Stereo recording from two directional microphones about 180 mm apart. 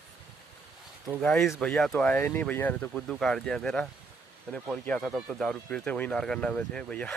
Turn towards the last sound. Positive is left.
turn(degrees=5)  # may be behind; listen again after turning